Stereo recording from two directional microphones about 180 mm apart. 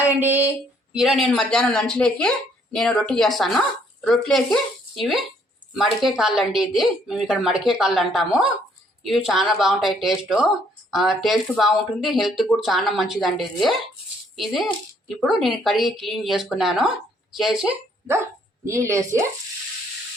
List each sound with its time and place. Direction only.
0.2 s a woman's voice: 10° right (ahead or behind)
18.6 s a woman's voice: 15° right (ahead or behind)